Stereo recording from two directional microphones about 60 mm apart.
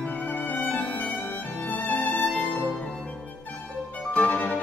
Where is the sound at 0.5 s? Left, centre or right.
Left.